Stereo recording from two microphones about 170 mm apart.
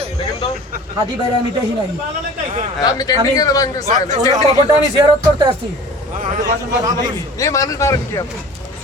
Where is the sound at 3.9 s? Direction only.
45° right (ahead or behind).